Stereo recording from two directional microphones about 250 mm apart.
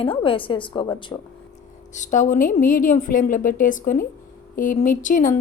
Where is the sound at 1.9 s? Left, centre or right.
Left.